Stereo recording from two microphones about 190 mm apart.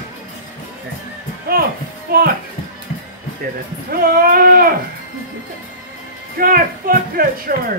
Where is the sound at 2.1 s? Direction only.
50° right (ahead or behind).